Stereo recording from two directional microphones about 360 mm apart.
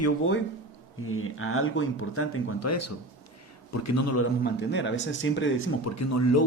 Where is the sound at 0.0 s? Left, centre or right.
Left.